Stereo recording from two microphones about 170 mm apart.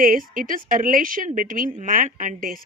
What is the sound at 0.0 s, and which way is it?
A woman's voice, 55° right (ahead or behind).